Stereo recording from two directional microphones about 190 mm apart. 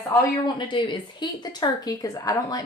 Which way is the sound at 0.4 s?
25° left (ahead or behind).